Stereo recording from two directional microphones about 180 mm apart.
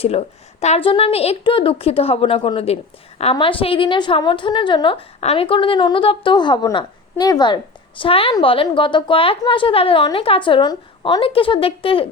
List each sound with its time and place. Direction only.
0.0 s a woman's voice: 35° left (ahead or behind)